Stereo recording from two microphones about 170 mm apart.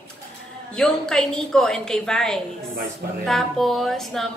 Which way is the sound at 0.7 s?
5° left (ahead or behind).